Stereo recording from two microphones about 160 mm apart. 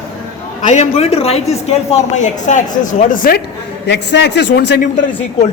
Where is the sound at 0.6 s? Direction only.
45° left (ahead or behind).